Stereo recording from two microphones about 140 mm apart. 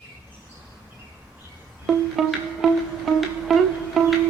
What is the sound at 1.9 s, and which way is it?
Music, centre (ahead or behind).